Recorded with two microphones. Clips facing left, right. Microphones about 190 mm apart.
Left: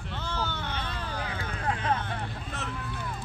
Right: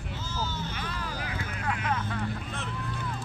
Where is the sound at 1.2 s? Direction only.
30° left (ahead or behind).